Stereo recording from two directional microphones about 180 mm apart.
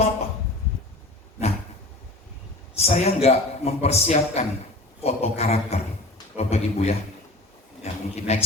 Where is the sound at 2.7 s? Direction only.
35° left (ahead or behind).